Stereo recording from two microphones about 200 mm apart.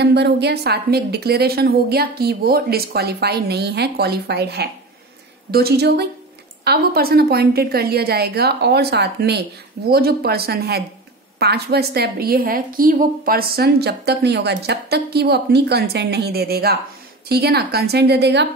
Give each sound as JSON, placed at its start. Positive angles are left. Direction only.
{"t": 0.0, "sound": "a woman's voice", "side_deg": -55}